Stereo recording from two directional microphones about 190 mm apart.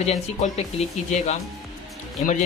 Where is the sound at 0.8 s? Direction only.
35° left (ahead or behind).